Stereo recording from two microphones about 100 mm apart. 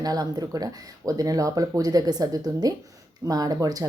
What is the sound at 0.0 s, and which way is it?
Speech, 40° right (ahead or behind).